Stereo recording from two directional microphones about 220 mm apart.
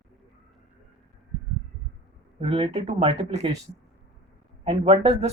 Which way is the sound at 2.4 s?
25° right (ahead or behind).